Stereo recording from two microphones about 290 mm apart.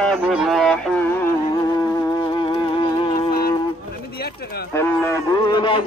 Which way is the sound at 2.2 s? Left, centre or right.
Centre.